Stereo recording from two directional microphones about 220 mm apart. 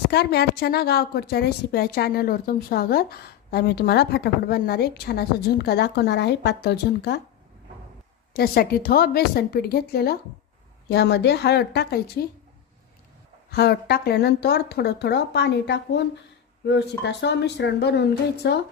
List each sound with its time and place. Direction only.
0.1 s a woman's voice: 45° left (ahead or behind)
8.3 s a woman's voice: 45° left (ahead or behind)
13.5 s a woman's voice: 45° left (ahead or behind)